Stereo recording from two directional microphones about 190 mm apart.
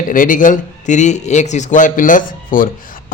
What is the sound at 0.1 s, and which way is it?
A man's voice, 45° left (ahead or behind).